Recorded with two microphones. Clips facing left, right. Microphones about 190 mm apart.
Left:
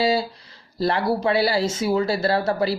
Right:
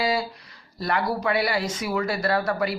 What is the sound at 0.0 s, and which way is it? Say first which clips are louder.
Speech: left 4 dB; 25° left (ahead or behind).